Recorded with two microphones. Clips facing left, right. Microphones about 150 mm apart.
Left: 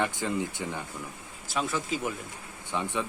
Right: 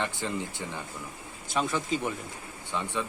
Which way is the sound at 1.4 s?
Centre (ahead or behind).